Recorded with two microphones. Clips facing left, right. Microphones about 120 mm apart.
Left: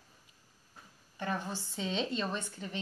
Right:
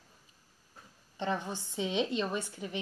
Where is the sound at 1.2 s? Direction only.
20° right (ahead or behind).